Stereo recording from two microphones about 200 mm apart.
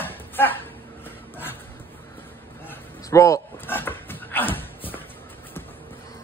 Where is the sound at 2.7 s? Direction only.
15° left (ahead or behind).